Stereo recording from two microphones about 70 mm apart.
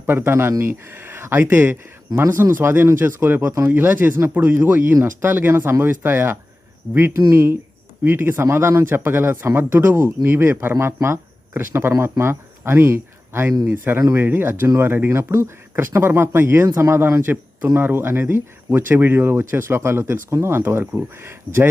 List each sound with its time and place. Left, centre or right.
0.0 s speech: right
3.7 s speech: right